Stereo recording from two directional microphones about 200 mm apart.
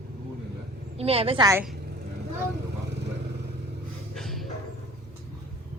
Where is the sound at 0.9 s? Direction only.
30° right (ahead or behind).